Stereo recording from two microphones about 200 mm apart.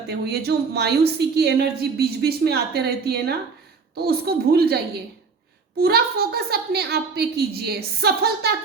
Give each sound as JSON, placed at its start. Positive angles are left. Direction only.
{"t": 0.1, "sound": "a woman's voice", "side_deg": -55}